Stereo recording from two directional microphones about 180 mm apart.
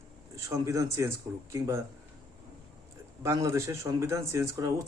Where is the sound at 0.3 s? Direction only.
20° right (ahead or behind).